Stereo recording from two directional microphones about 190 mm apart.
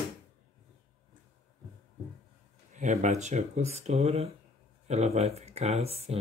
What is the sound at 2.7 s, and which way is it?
Speech, 40° right (ahead or behind).